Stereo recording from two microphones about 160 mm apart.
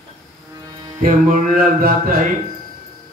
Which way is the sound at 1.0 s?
60° right (ahead or behind).